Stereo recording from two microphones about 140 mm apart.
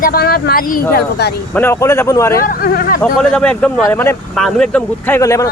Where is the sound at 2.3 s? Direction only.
90° left.